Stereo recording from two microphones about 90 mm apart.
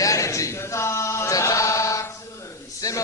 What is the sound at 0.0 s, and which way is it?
Chant, 35° left (ahead or behind).